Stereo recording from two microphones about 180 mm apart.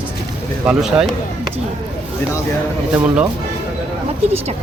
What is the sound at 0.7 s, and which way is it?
Speech, 5° right (ahead or behind).